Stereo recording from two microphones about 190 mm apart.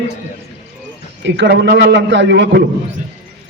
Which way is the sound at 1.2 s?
65° right (ahead or behind).